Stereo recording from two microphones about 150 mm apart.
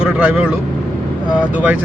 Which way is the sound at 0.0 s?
5° right (ahead or behind).